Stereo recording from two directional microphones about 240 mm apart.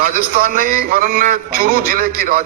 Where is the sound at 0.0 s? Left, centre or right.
Right.